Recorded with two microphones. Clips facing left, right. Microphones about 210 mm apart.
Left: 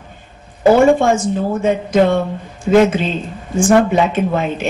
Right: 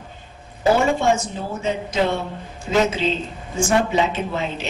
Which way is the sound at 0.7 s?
50° left (ahead or behind).